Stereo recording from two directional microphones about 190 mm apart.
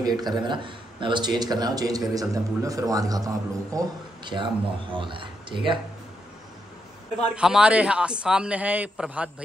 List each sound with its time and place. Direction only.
0.0 s speech: 20° right (ahead or behind)
7.3 s a man's voice: 5° right (ahead or behind)